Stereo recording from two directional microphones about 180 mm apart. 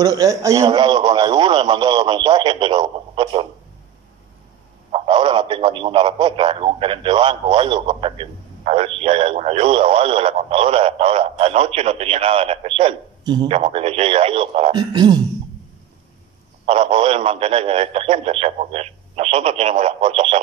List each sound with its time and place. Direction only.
0.0 s a man's voice: 20° right (ahead or behind)
4.9 s a man's voice: 30° right (ahead or behind)
16.6 s a man's voice: 30° right (ahead or behind)